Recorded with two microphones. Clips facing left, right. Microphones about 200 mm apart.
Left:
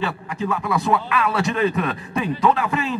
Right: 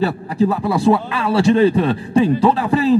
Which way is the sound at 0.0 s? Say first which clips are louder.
Right 9 dB; 35° right (ahead or behind).